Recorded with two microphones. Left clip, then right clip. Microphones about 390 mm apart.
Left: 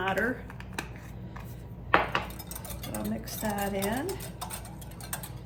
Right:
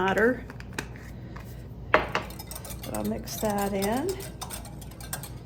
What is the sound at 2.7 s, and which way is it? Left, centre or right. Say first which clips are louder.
Stir: right 4 dB; centre.